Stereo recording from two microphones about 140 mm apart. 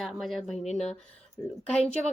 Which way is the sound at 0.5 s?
55° left (ahead or behind).